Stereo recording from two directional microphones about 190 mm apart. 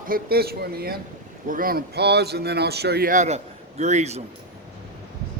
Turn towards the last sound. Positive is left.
turn(degrees=-35)  # may be behind; listen again after turning